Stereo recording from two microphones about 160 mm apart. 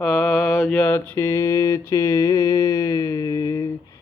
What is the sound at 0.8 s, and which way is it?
Mantra, 10° left (ahead or behind).